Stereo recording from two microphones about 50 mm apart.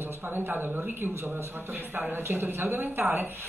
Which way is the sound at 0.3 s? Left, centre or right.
Right.